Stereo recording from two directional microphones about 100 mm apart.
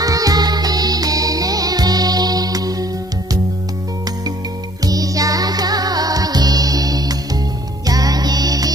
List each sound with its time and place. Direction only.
0.0 s music: 35° right (ahead or behind)
4.8 s music: 35° right (ahead or behind)